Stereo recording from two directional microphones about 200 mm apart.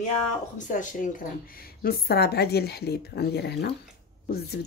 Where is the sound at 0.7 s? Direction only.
40° left (ahead or behind).